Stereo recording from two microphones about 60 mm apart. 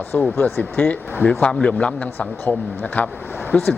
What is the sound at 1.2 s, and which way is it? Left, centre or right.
Speech, left.